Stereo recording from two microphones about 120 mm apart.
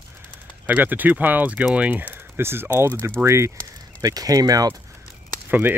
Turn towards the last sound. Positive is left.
turn(degrees=-15)  # may be behind; listen again after turning